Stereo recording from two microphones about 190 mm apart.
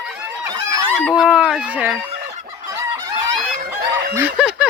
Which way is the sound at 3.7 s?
60° right (ahead or behind).